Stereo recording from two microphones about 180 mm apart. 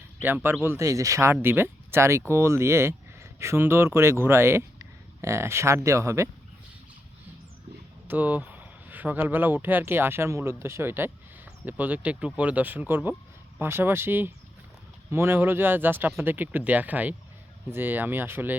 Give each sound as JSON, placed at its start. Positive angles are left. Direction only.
{"t": 0.2, "sound": "speech", "side_deg": -10}
{"t": 8.0, "sound": "speech", "side_deg": -10}